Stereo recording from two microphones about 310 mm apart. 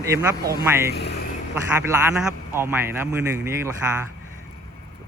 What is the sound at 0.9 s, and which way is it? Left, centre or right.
Speech, left.